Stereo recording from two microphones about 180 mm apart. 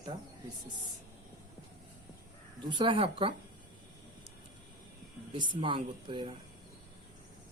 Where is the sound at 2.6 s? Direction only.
25° right (ahead or behind).